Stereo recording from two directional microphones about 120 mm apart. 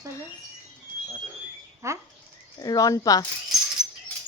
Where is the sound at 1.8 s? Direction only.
25° right (ahead or behind).